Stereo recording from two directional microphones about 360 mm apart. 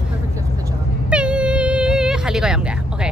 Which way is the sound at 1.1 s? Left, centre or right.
Centre.